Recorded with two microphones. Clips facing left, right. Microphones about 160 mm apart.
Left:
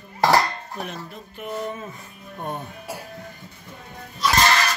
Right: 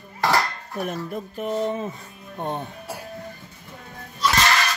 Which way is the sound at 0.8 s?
50° right (ahead or behind).